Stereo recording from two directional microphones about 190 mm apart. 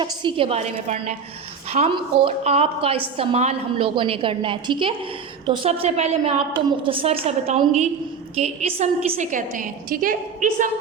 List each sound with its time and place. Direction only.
0.0 s a woman's voice: 25° right (ahead or behind); by 10.7 s 45° right (ahead or behind)